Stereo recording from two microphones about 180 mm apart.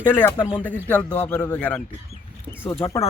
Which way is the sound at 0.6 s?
10° left (ahead or behind).